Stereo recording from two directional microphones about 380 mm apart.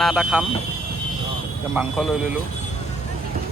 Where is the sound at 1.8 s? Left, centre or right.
Centre.